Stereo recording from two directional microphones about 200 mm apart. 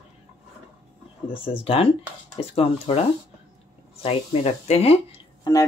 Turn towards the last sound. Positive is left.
turn(degrees=15)  # may be behind; listen again after turning